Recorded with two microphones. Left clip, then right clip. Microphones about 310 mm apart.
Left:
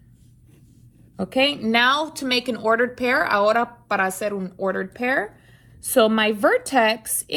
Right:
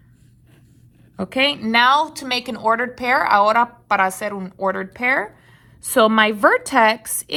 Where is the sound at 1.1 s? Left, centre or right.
Right.